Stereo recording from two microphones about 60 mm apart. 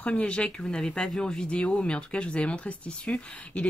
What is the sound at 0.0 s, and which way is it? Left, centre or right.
Speech, centre.